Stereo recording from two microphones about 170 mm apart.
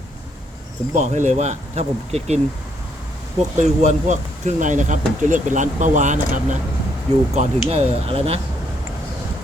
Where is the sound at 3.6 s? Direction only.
45° right (ahead or behind).